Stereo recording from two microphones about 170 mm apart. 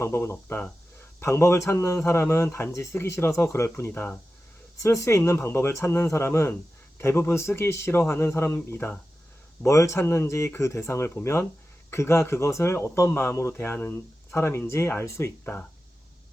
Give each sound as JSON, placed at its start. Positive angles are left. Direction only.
{"t": 0.0, "sound": "speech", "side_deg": 15}